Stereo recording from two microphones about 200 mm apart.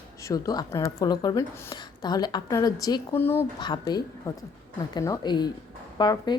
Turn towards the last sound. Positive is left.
turn(degrees=20)  # may be behind; listen again after turning